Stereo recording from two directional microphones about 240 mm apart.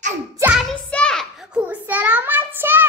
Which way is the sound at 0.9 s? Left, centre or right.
Centre.